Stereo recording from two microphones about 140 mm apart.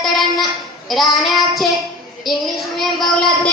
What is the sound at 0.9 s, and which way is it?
Child singing, centre (ahead or behind).